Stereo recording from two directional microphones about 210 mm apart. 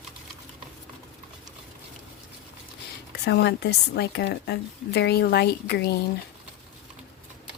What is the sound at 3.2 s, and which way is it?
A woman's voice, 50° left (ahead or behind).